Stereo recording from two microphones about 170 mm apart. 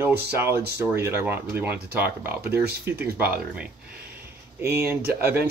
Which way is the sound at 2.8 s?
10° right (ahead or behind).